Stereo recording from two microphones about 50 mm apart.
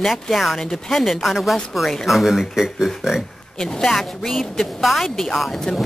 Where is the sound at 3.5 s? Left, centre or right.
Centre.